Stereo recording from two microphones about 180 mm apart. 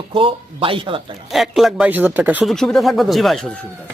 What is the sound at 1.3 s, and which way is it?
Speech, centre (ahead or behind).